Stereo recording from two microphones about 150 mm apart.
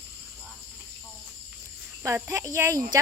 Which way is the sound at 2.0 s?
20° right (ahead or behind).